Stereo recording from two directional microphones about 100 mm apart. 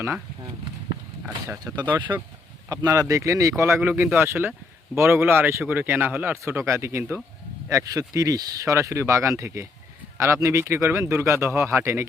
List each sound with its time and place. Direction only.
1.7 s speech: 25° right (ahead or behind)
2.6 s speech: 35° right (ahead or behind)